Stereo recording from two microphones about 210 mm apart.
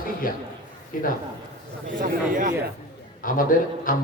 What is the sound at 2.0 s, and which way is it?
Speech, 40° right (ahead or behind).